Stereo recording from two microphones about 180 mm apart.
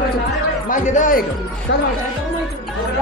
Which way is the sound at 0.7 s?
45° left (ahead or behind).